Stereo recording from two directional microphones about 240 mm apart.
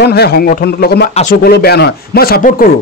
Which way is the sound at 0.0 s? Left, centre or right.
Left.